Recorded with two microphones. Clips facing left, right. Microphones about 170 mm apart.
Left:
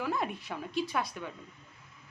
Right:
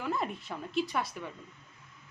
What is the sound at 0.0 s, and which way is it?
Speech, centre (ahead or behind).